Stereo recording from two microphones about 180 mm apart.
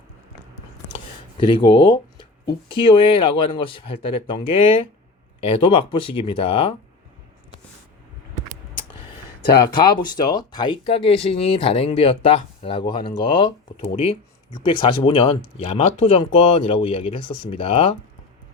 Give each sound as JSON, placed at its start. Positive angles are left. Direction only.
{"t": 1.4, "sound": "speech", "side_deg": 25}
{"t": 9.5, "sound": "speech", "side_deg": 60}
{"t": 10.0, "sound": "speech", "side_deg": 20}